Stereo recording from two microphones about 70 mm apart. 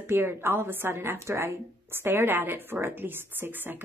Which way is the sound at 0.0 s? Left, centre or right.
Right.